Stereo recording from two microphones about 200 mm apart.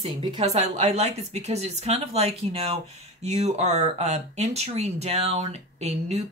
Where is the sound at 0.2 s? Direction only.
35° right (ahead or behind).